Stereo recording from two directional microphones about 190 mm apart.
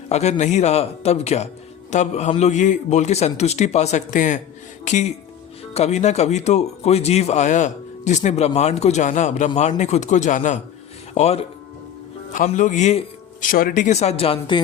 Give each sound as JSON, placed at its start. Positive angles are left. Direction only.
{"t": 0.1, "sound": "speech", "side_deg": 35}
{"t": 13.5, "sound": "speech", "side_deg": 50}